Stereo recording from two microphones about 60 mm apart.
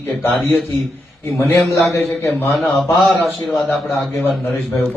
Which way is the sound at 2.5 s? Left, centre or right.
Centre.